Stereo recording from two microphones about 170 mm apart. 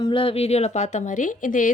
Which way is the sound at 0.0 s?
30° left (ahead or behind).